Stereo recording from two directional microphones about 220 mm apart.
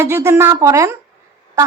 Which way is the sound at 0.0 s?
10° right (ahead or behind).